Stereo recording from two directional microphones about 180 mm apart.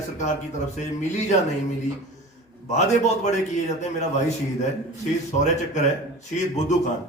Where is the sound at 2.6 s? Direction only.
40° left (ahead or behind).